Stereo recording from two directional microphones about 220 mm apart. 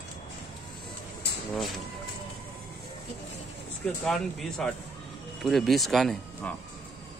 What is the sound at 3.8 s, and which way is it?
Speech, 5° left (ahead or behind).